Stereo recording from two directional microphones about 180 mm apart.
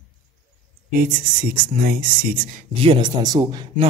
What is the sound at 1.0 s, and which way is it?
Speech, 55° right (ahead or behind).